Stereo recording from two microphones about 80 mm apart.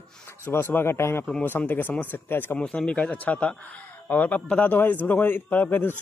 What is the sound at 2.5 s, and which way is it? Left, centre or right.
A man's voice, centre.